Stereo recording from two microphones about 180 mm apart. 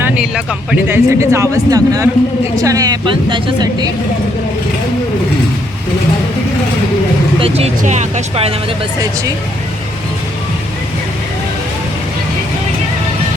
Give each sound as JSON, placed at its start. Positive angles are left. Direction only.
{"t": 0.0, "sound": "a woman's voice", "side_deg": -5}
{"t": 7.3, "sound": "speech", "side_deg": -35}